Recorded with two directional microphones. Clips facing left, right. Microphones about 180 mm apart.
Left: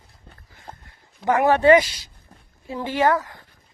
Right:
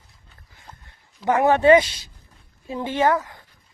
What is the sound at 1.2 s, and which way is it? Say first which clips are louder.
Speech: even; 20° right (ahead or behind).